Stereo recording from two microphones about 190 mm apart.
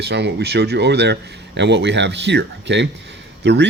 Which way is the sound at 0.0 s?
60° right (ahead or behind).